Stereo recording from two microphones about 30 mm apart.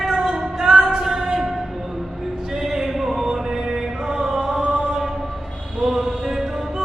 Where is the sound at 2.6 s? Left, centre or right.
Centre.